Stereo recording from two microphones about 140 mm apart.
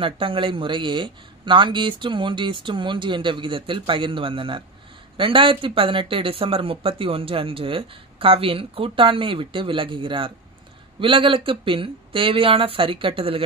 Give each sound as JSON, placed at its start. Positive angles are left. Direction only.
{"t": 0.0, "sound": "speech", "side_deg": -40}